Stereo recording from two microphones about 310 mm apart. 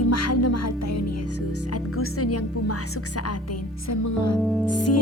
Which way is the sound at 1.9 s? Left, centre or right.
Left.